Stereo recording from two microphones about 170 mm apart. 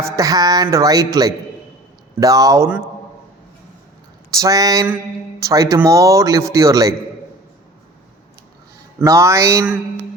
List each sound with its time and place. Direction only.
0.0 s speech: 20° right (ahead or behind)
4.3 s speech: 20° right (ahead or behind)
9.0 s speech: 15° right (ahead or behind)